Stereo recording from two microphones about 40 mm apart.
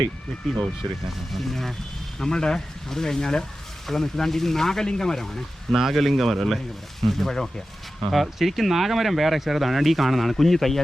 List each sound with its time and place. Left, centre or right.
1.3 s speech: centre
2.1 s speech: centre
5.7 s speech: centre